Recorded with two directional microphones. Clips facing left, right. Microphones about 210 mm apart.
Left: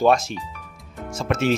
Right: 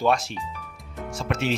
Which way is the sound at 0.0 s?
45° left (ahead or behind).